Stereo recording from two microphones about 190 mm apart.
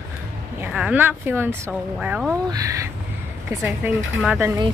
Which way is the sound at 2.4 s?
20° right (ahead or behind).